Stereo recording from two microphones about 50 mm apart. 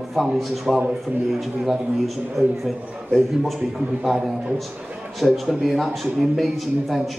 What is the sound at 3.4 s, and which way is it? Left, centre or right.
A man's voice, centre.